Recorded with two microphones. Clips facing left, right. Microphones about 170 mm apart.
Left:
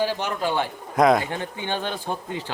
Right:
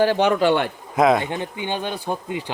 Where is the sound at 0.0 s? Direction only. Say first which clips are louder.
Right 8 dB; 65° right (ahead or behind).